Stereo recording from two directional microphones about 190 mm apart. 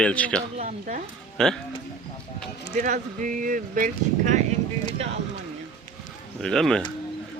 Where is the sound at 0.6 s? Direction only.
40° right (ahead or behind).